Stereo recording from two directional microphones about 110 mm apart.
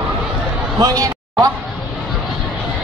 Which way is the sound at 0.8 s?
35° right (ahead or behind).